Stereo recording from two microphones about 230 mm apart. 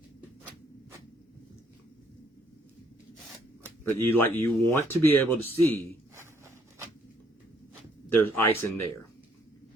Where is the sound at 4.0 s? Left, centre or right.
Centre.